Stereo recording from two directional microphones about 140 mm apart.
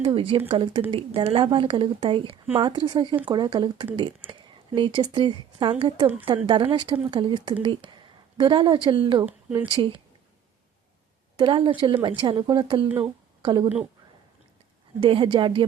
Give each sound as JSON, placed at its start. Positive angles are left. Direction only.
{"t": 0.0, "sound": "a woman's voice", "side_deg": -40}
{"t": 9.2, "sound": "speech", "side_deg": -15}
{"t": 11.3, "sound": "a woman's voice", "side_deg": -35}
{"t": 15.0, "sound": "speech", "side_deg": -40}